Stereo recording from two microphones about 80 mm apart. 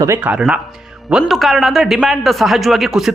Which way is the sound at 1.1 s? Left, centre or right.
Centre.